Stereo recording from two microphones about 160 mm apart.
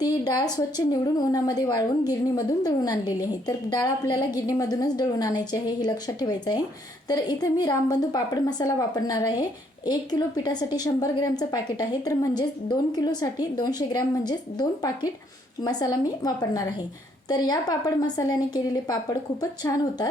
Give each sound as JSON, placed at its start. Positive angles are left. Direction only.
{"t": 0.0, "sound": "a woman's voice", "side_deg": 25}